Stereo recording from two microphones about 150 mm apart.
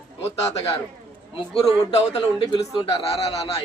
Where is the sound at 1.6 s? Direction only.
45° left (ahead or behind).